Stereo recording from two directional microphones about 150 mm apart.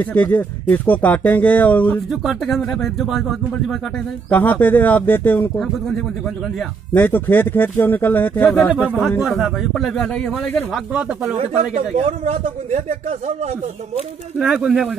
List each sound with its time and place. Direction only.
0.0 s speech: 10° left (ahead or behind)
2.0 s a man's voice: centre (ahead or behind)
4.3 s speech: 10° left (ahead or behind)
9.2 s a man's voice: centre (ahead or behind)
11.3 s a man's voice: 45° right (ahead or behind)
14.4 s a man's voice: 5° right (ahead or behind)